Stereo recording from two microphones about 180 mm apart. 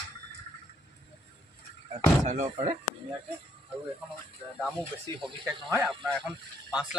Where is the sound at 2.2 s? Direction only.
40° right (ahead or behind).